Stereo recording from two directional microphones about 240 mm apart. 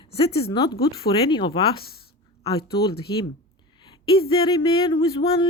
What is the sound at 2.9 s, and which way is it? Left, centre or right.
Speech, left.